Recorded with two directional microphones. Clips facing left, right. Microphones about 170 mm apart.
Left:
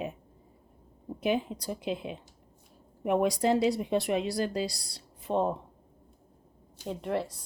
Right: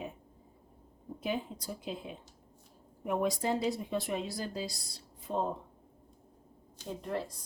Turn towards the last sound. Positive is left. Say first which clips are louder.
# left 5 dB
turn(degrees=70)  # may be behind; listen again after turning